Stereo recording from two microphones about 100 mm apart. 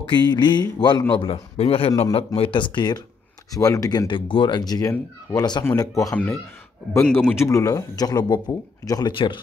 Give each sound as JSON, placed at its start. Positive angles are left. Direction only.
{"t": 0.2, "sound": "speech", "side_deg": 45}
{"t": 1.1, "sound": "a man's voice", "side_deg": 65}
{"t": 3.5, "sound": "speech", "side_deg": 35}
{"t": 4.1, "sound": "speech", "side_deg": 55}
{"t": 4.6, "sound": "speech", "side_deg": 40}
{"t": 7.0, "sound": "speech", "side_deg": 10}
{"t": 7.3, "sound": "speech", "side_deg": 35}
{"t": 9.1, "sound": "speech", "side_deg": 55}